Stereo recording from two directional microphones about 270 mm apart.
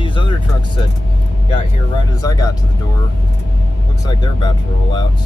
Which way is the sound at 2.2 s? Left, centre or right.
Centre.